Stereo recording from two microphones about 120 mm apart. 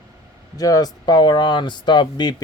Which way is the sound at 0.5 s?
30° left (ahead or behind).